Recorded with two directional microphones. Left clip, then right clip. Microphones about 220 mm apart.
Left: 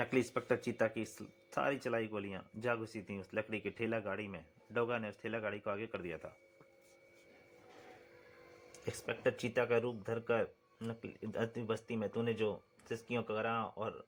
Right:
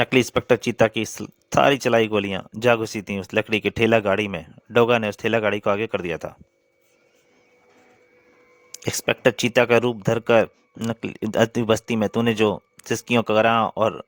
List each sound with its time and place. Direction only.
0.0 s speech: 40° right (ahead or behind)
8.7 s speech: 50° right (ahead or behind)